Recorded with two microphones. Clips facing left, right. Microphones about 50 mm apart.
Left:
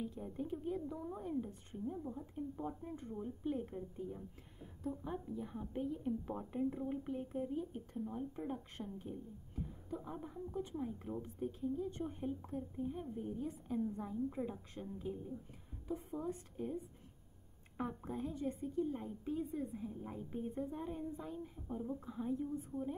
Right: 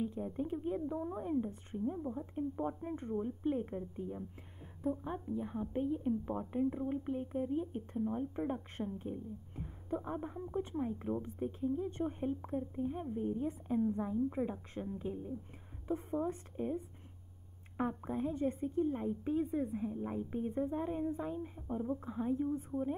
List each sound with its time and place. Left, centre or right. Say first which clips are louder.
0.0 s a woman's voice: right 5 dB; centre
15.9 s a woman's voice: right 6 dB; right
18.3 s a woman's voice: right 4 dB; right